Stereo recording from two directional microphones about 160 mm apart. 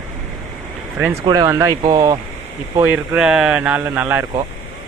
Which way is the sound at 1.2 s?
25° right (ahead or behind).